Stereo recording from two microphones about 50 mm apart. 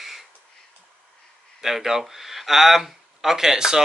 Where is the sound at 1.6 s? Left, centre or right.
Centre.